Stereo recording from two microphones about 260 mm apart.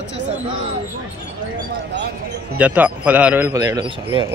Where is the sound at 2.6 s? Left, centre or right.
Centre.